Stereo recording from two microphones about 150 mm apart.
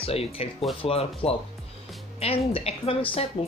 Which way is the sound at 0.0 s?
40° left (ahead or behind).